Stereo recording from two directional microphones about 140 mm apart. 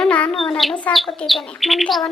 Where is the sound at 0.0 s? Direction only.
5° left (ahead or behind).